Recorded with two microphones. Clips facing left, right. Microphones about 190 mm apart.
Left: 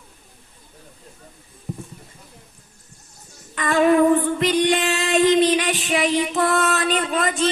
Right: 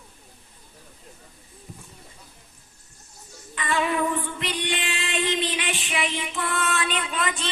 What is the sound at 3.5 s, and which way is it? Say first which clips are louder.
Female singing: left 9 dB; 45° left (ahead or behind).